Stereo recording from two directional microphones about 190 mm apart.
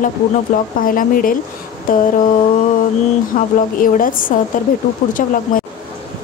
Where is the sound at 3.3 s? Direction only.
45° left (ahead or behind).